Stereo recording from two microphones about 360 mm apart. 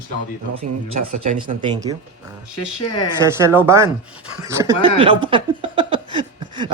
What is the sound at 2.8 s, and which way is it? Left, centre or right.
Speech, left.